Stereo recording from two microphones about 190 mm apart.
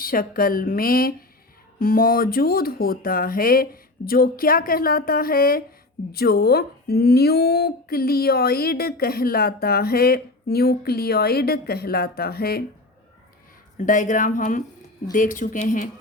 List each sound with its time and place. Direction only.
0.0 s speech: 50° left (ahead or behind)
13.7 s speech: 45° left (ahead or behind)